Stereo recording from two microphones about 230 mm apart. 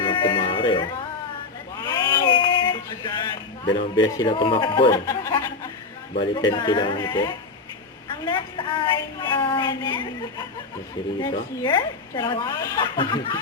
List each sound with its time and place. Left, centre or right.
0.0 s music: left
1.8 s a sound: centre
3.7 s a woman's voice: centre